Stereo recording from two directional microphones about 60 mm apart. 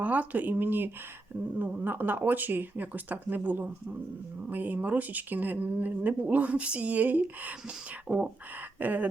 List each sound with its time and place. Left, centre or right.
0.0 s speech: right